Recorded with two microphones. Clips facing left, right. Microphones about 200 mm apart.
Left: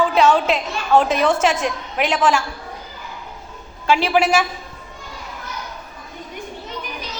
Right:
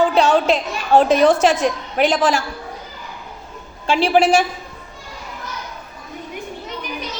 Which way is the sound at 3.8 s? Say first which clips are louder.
Right 2 dB; 30° right (ahead or behind).